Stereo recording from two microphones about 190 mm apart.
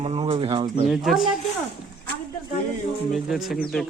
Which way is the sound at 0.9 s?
Centre (ahead or behind).